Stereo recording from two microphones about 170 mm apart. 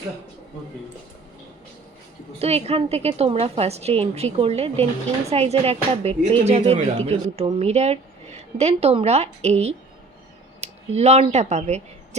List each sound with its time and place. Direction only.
2.4 s a woman's voice: 35° right (ahead or behind)